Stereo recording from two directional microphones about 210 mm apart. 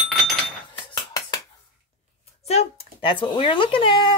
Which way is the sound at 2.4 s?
30° left (ahead or behind).